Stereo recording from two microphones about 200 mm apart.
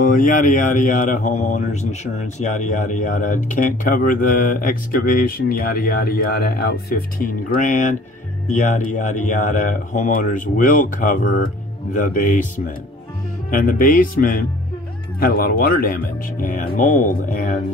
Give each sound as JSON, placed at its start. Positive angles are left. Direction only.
{"t": 0.0, "sound": "mantra", "side_deg": 40}
{"t": 13.5, "sound": "speech", "side_deg": 45}